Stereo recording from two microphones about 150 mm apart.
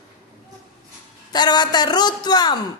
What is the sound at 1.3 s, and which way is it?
Speech, 30° left (ahead or behind).